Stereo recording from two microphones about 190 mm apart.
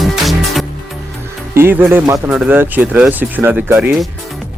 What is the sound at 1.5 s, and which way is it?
Speech, 10° right (ahead or behind).